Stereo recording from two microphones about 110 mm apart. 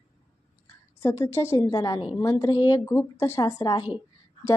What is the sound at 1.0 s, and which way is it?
Speech, 25° left (ahead or behind).